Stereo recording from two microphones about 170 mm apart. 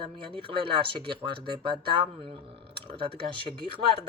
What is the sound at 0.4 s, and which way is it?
Speech, 30° right (ahead or behind).